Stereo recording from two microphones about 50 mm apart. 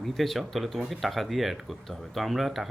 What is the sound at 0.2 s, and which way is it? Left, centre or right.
Speech, centre.